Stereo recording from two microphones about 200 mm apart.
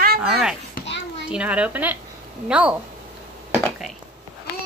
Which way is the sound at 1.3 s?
5° right (ahead or behind).